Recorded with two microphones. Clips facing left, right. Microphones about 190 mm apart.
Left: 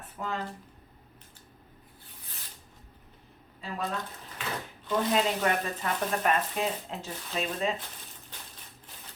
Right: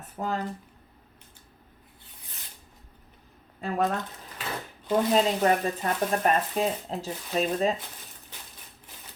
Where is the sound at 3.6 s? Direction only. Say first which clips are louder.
Right 8 dB; 50° right (ahead or behind).